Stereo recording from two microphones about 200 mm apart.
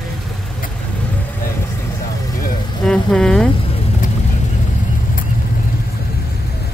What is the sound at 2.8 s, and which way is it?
Vehicle, 5° left (ahead or behind).